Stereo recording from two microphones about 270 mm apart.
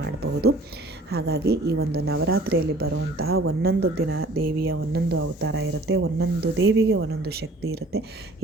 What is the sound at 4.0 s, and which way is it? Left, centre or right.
A woman's voice, right.